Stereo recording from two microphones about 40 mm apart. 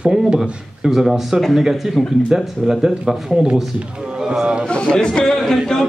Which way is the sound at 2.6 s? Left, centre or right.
Centre.